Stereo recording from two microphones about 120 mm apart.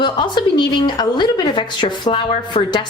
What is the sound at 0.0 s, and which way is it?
A woman's voice, 40° left (ahead or behind).